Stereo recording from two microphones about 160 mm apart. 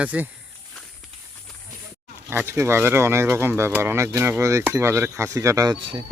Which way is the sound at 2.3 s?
15° right (ahead or behind).